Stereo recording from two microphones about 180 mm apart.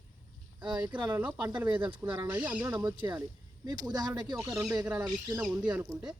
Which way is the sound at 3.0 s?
25° right (ahead or behind).